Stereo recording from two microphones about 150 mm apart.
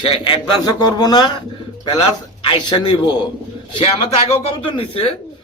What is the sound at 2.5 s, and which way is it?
Speech, 30° left (ahead or behind).